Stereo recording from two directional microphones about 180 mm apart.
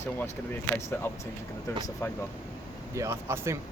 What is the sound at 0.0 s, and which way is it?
Speech, 15° left (ahead or behind).